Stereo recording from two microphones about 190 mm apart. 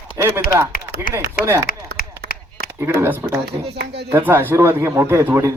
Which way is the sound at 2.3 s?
50° left (ahead or behind).